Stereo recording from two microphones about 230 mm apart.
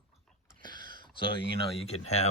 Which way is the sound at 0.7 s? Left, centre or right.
Right.